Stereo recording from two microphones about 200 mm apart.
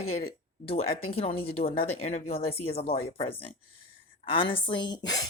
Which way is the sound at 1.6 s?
30° left (ahead or behind).